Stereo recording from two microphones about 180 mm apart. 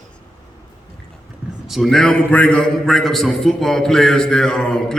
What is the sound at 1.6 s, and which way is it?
A man's voice, centre (ahead or behind).